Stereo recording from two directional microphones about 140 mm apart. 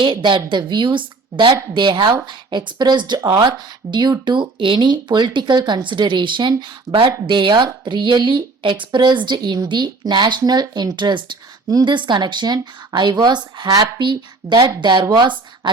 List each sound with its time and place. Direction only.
0.0 s speech: 35° right (ahead or behind)